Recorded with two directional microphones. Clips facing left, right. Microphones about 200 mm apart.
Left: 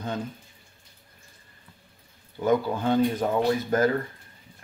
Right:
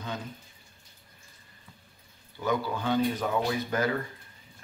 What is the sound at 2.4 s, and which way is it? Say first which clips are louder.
Speech: left 6 dB; 50° left (ahead or behind).